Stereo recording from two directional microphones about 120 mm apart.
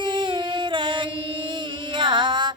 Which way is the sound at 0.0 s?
40° right (ahead or behind).